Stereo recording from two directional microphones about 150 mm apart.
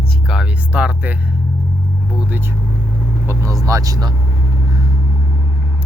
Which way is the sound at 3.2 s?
20° right (ahead or behind).